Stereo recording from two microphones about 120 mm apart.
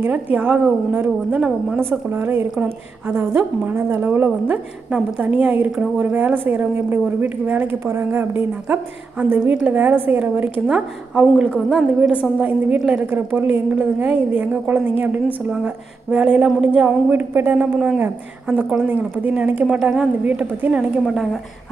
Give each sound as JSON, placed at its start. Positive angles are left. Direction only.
{"t": 0.0, "sound": "a woman's voice", "side_deg": -10}
{"t": 21.0, "sound": "a woman's voice", "side_deg": 0}